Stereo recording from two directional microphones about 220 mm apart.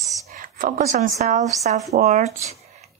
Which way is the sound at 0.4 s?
40° right (ahead or behind).